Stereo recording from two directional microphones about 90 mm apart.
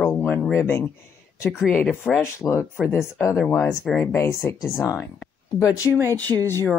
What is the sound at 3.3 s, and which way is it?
Speech, 5° left (ahead or behind).